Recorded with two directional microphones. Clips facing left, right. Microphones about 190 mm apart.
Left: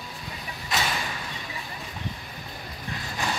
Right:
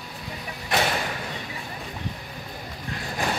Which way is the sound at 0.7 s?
60° right (ahead or behind).